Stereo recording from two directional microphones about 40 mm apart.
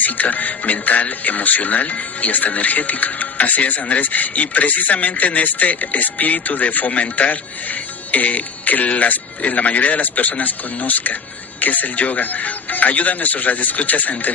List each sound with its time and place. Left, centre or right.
0.0 s speech: left